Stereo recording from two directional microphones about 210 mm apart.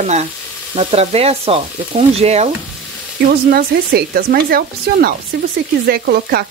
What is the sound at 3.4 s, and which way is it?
Speech, 45° right (ahead or behind).